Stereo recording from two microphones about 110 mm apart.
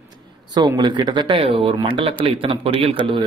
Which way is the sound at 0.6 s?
40° right (ahead or behind).